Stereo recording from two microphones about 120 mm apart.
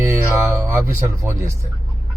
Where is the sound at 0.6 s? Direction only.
20° right (ahead or behind).